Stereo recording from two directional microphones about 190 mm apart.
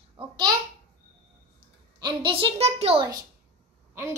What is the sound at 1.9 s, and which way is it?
A child's voice, 25° right (ahead or behind).